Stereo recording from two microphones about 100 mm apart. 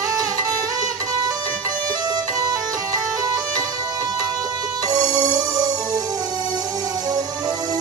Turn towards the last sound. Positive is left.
turn(degrees=-40)  # may be behind; listen again after turning